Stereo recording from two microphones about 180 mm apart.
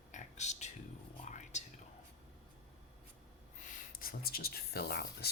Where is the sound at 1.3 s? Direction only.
40° left (ahead or behind).